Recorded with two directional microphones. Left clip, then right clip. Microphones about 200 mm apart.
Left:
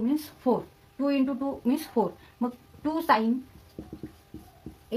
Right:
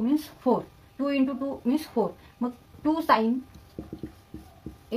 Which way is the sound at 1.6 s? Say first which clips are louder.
Even; 40° left (ahead or behind).